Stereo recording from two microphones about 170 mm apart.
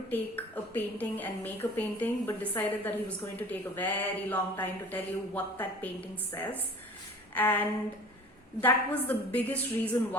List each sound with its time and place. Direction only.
0.1 s a woman's voice: 10° left (ahead or behind)